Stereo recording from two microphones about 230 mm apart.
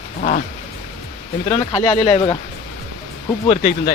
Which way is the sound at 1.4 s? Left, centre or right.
Left.